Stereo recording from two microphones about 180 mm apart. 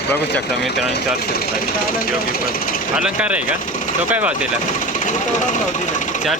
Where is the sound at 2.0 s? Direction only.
50° left (ahead or behind).